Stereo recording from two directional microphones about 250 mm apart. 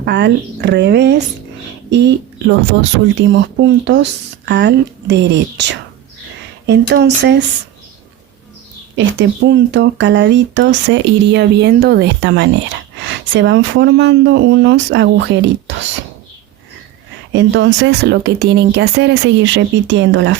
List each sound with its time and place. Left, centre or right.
0.0 s speech: right
9.0 s speech: right
17.3 s speech: right